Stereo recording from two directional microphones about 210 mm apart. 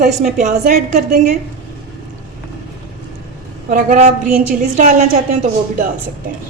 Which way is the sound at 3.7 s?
35° right (ahead or behind).